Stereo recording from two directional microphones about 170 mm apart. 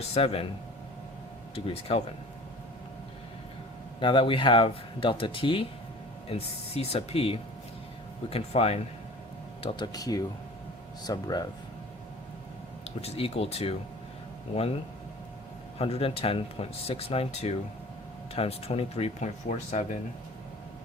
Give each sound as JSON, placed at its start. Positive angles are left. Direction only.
{"t": 0.1, "sound": "speech", "side_deg": 35}
{"t": 1.5, "sound": "speech", "side_deg": 35}
{"t": 4.0, "sound": "speech", "side_deg": 30}
{"t": 9.6, "sound": "speech", "side_deg": 25}
{"t": 13.0, "sound": "speech", "side_deg": 35}
{"t": 15.8, "sound": "speech", "side_deg": 35}